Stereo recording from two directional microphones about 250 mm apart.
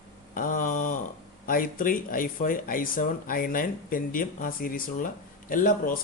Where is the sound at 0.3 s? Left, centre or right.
Left.